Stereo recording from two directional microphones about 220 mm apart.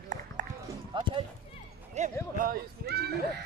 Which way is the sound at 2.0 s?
30° right (ahead or behind).